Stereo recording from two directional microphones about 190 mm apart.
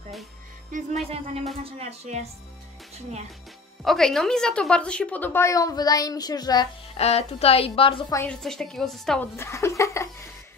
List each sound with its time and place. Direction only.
0.7 s speech: 40° right (ahead or behind)
1.0 s speech: 30° right (ahead or behind)
3.8 s speech: centre (ahead or behind); by 6.7 s 20° left (ahead or behind)
7.0 s a woman's voice: 30° left (ahead or behind)
8.1 s speech: 10° left (ahead or behind)
9.4 s speech: 15° left (ahead or behind)